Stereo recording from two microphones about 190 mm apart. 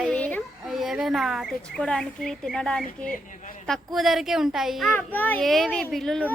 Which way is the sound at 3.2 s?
45° left (ahead or behind).